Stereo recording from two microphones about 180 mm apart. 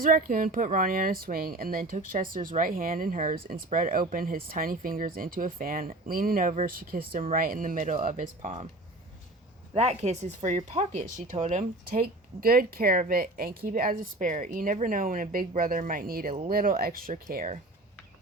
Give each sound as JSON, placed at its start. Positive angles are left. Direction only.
{"t": 0.0, "sound": "speech", "side_deg": -50}
{"t": 9.7, "sound": "speech", "side_deg": -35}
{"t": 12.4, "sound": "speech", "side_deg": -55}